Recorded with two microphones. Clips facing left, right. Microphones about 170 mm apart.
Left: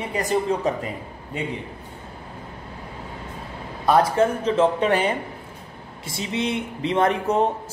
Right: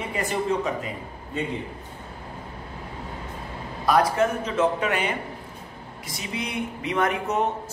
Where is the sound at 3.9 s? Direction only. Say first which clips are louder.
Left 3 dB; 30° left (ahead or behind).